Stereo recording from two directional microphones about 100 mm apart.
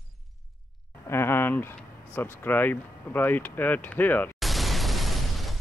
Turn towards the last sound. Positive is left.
turn(degrees=0)  # may be behind; listen again after turning